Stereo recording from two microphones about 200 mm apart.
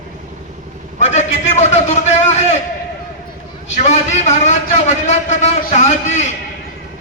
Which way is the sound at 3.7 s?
35° left (ahead or behind).